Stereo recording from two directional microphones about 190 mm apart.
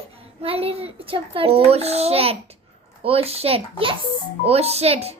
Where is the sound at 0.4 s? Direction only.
30° right (ahead or behind).